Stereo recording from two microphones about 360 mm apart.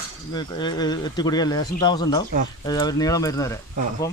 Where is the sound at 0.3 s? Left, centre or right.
Centre.